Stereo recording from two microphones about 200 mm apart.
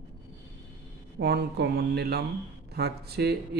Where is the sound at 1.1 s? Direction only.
55° right (ahead or behind).